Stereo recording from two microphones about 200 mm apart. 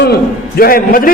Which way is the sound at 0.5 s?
45° left (ahead or behind).